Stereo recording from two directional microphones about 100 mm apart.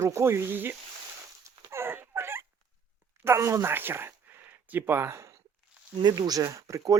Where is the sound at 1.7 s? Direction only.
25° right (ahead or behind).